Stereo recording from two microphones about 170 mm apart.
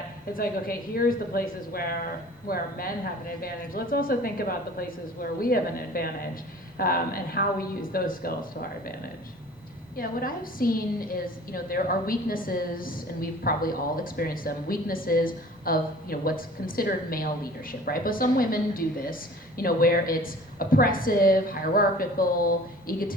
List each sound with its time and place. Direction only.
0.3 s a woman's voice: 60° left (ahead or behind)
9.9 s a woman's voice: 60° left (ahead or behind)